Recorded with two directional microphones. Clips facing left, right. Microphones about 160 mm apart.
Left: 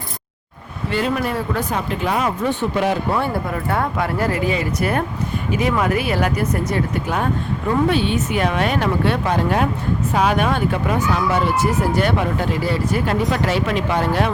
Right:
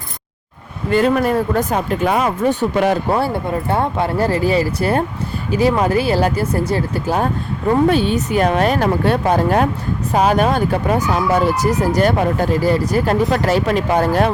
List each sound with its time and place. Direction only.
0.9 s speech: 45° right (ahead or behind)